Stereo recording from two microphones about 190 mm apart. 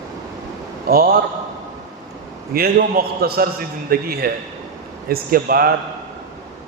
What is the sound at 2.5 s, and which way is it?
A man's voice, 55° right (ahead or behind).